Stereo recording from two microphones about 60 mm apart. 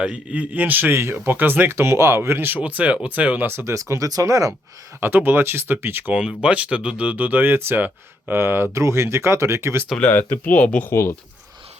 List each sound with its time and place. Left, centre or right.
0.0 s speech: right
0.9 s speech: right
3.4 s speech: right
3.8 s speech: right
4.9 s speech: right
6.1 s speech: centre; by 8.6 s right
8.7 s speech: right
10.0 s speech: left